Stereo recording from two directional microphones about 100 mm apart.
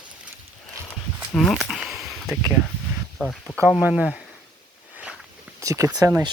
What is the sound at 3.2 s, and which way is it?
Speech, 10° right (ahead or behind).